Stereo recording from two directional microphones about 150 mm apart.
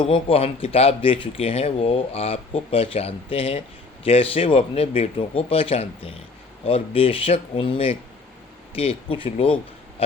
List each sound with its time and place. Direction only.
0.0 s speech: 40° left (ahead or behind)